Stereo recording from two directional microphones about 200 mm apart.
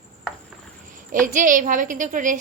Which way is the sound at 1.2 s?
40° right (ahead or behind).